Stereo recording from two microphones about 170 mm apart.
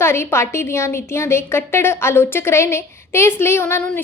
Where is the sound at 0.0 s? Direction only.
15° left (ahead or behind).